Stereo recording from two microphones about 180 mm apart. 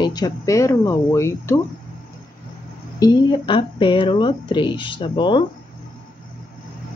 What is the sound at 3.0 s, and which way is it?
Speech, 25° left (ahead or behind).